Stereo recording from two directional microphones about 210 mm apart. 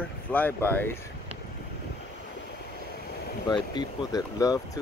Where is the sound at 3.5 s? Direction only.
20° left (ahead or behind).